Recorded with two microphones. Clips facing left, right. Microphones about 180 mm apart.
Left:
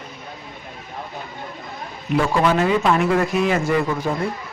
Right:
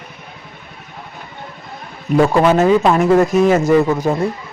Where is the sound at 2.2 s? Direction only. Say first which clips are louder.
Right 6 dB; 40° right (ahead or behind).